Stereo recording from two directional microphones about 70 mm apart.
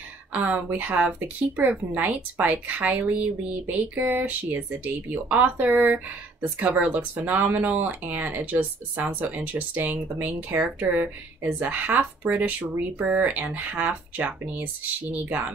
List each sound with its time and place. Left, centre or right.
0.3 s a woman's voice: right